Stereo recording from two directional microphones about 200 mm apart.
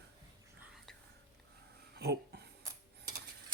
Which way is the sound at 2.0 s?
55° right (ahead or behind).